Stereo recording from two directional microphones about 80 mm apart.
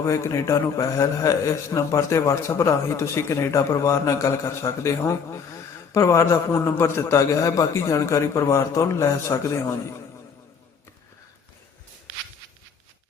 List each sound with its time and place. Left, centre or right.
0.0 s a man's voice: left